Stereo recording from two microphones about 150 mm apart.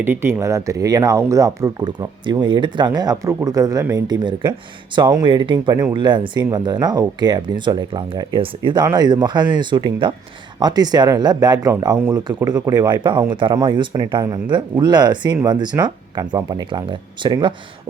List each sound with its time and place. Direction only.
0.0 s speech: 15° right (ahead or behind); by 17.5 s 30° right (ahead or behind)